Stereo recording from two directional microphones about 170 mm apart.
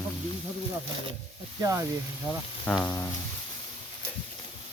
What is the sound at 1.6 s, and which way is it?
Speech, 20° right (ahead or behind).